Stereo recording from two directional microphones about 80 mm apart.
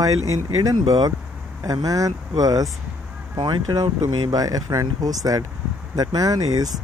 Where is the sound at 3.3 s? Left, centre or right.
Right.